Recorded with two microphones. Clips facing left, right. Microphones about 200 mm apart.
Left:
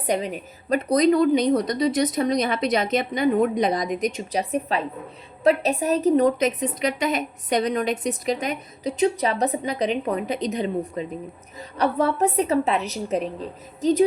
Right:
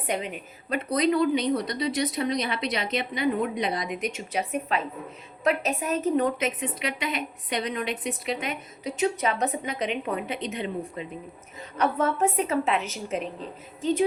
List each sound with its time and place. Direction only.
0.1 s a woman's voice: 35° left (ahead or behind)